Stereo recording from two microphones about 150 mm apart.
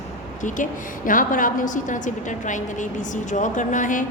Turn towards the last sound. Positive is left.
turn(degrees=60)  # may be behind; listen again after turning